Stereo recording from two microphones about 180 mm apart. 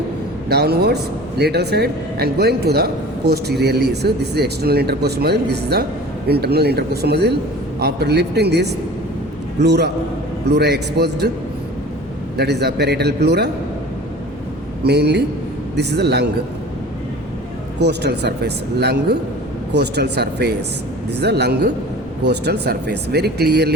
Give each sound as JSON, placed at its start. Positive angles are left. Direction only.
{"t": 0.4, "sound": "speech", "side_deg": -60}
{"t": 12.4, "sound": "speech", "side_deg": -65}
{"t": 14.8, "sound": "speech", "side_deg": -65}
{"t": 17.7, "sound": "speech", "side_deg": -65}